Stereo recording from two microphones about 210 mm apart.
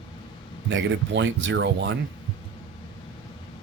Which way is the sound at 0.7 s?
60° right (ahead or behind).